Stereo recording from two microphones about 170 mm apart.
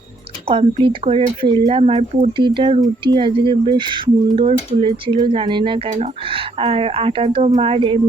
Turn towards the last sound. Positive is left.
turn(degrees=-30)  # may be behind; listen again after turning